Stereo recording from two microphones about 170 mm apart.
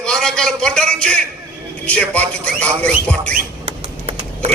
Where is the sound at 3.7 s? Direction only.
35° right (ahead or behind).